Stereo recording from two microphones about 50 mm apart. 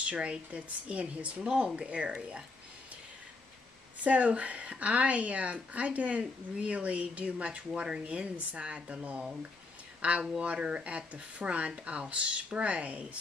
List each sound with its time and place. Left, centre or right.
0.0 s speech: right
4.0 s speech: right